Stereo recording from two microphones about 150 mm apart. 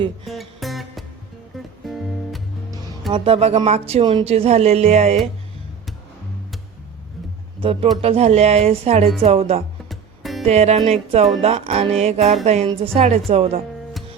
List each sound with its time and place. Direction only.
0.3 s music: centre (ahead or behind)
3.1 s speech: 40° right (ahead or behind)
7.6 s speech: 40° right (ahead or behind)
9.9 s music: centre (ahead or behind)
10.4 s speech: 45° right (ahead or behind)